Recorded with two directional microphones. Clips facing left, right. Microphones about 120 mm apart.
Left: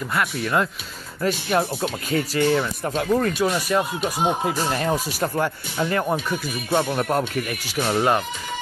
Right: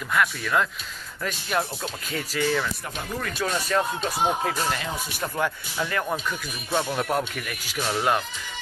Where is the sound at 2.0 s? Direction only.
50° left (ahead or behind).